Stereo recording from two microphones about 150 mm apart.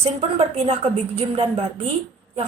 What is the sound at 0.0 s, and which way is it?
Speech, 40° right (ahead or behind).